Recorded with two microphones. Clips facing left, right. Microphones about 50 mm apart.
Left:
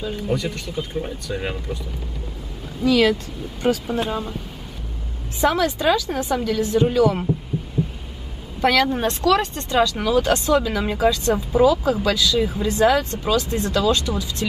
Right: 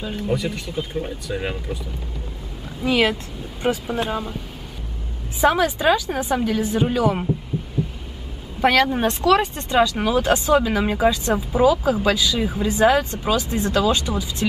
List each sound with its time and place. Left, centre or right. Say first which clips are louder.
0.0 s speech: even; centre
2.8 s speech: left 2 dB; right
3.8 s speech: even; centre
5.4 s speech: right 1 dB; centre
7.8 s heart sounds: left 1 dB; centre
8.5 s speech: right 1 dB; centre